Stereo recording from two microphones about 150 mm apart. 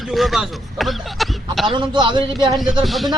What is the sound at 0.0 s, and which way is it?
Speech, centre (ahead or behind).